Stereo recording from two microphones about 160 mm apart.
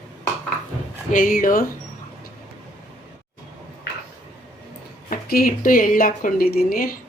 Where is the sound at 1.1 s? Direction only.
60° left (ahead or behind).